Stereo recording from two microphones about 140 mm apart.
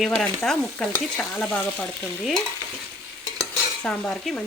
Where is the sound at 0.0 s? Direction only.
Centre (ahead or behind).